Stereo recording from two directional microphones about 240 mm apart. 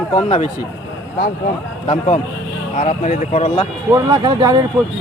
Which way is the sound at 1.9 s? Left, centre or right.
Left.